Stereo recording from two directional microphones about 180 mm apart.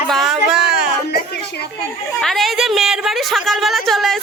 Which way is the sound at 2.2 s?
Centre (ahead or behind).